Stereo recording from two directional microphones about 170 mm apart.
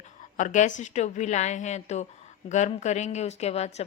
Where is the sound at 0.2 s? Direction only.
50° left (ahead or behind).